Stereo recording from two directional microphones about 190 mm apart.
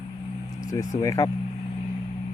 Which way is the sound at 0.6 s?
15° left (ahead or behind).